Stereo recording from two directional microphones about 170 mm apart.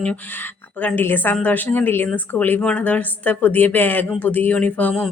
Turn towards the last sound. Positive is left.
turn(degrees=5)  # may be behind; listen again after turning